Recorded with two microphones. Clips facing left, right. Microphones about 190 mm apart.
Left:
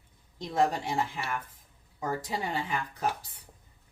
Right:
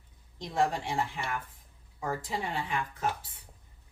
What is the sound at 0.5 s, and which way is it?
Speech, 40° left (ahead or behind).